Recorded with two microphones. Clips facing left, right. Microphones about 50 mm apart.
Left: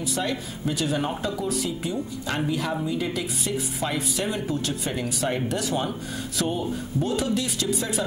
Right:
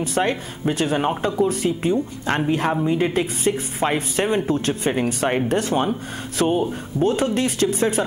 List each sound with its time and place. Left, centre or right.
0.0 s speech: right